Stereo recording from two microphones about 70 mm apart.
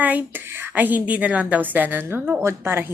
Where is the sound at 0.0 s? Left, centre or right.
Right.